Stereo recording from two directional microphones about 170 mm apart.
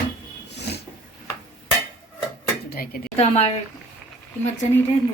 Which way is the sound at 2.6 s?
60° left (ahead or behind).